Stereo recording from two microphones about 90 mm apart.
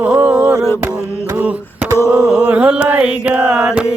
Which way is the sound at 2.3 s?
15° right (ahead or behind).